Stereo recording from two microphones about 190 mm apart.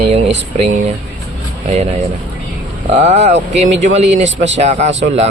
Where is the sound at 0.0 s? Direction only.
35° right (ahead or behind).